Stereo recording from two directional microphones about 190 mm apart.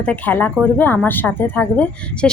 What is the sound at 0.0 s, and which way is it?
A woman's voice, 10° left (ahead or behind).